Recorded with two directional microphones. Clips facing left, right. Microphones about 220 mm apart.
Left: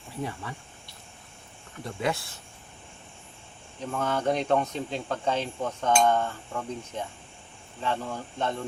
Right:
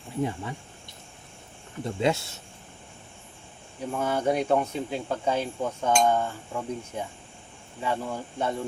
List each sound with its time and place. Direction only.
0.2 s speech: 20° right (ahead or behind)
3.9 s speech: 10° right (ahead or behind)